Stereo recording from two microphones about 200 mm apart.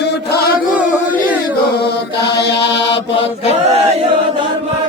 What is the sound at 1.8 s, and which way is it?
Mantra, 55° left (ahead or behind).